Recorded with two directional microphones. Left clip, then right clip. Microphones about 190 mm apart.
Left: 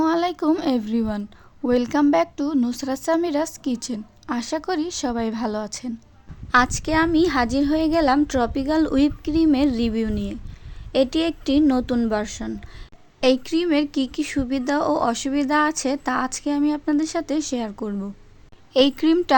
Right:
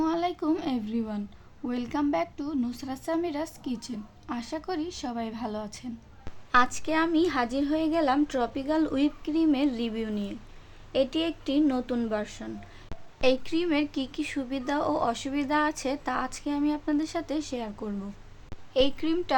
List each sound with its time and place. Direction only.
0.0 s a woman's voice: 45° left (ahead or behind)